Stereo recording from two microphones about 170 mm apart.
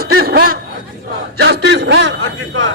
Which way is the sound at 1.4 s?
85° right.